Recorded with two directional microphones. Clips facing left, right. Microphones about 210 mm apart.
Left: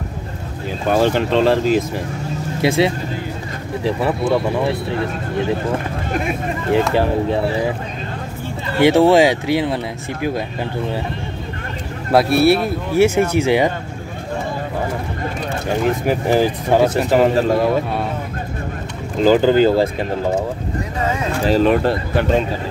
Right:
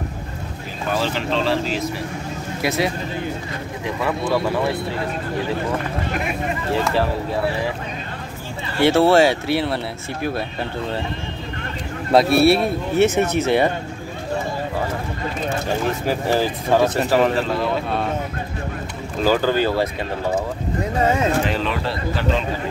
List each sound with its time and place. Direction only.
0.8 s speech: 50° left (ahead or behind)
2.6 s speech: 25° left (ahead or behind)
7.0 s speech: 20° left (ahead or behind)
8.8 s speech: 15° left (ahead or behind)
12.1 s speech: centre (ahead or behind)
16.0 s speech: 15° left (ahead or behind)
17.4 s speech: 45° left (ahead or behind)
19.2 s speech: 20° left (ahead or behind)
21.5 s speech: 45° left (ahead or behind)